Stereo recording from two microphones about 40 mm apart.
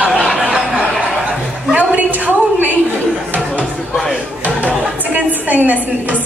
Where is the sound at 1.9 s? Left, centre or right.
Right.